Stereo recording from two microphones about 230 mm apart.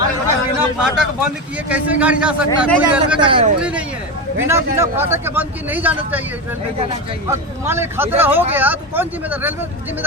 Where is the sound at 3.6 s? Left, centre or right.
Centre.